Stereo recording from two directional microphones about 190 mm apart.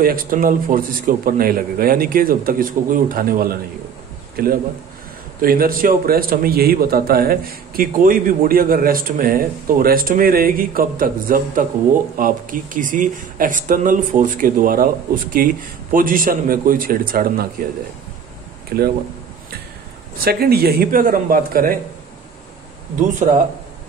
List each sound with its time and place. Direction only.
0.0 s a man's voice: 50° right (ahead or behind)
18.7 s a man's voice: 55° right (ahead or behind)
20.2 s a man's voice: 55° right (ahead or behind)
22.9 s speech: 40° right (ahead or behind)